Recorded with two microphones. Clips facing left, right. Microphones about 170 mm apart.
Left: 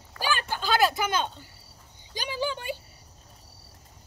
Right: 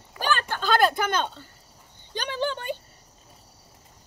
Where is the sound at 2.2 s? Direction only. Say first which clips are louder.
Right 2 dB; 10° left (ahead or behind).